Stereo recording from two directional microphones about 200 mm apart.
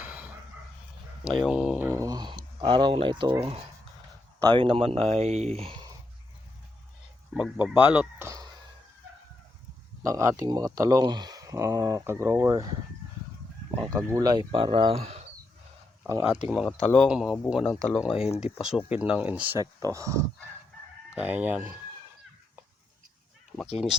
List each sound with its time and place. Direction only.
0.0 s bow-wow: 5° right (ahead or behind)
1.2 s speech: centre (ahead or behind); by 5.9 s 25° right (ahead or behind)
7.3 s speech: 5° right (ahead or behind)
10.0 s speech: 15° right (ahead or behind); by 15.3 s 30° right (ahead or behind)
16.0 s speech: 15° right (ahead or behind)
16.5 s speech: 5° right (ahead or behind)